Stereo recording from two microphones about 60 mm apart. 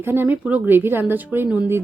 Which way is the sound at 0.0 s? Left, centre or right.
Right.